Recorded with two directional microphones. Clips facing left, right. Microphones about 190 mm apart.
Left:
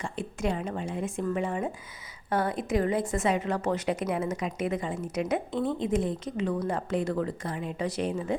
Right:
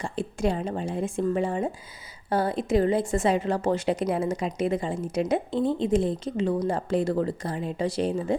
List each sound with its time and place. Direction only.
0.0 s a woman's voice: 30° right (ahead or behind)